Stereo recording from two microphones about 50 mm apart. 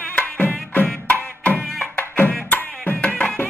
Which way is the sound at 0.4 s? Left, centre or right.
Left.